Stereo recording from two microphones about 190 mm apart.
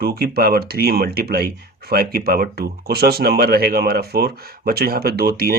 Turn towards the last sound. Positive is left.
turn(degrees=-55)  # may be behind; listen again after turning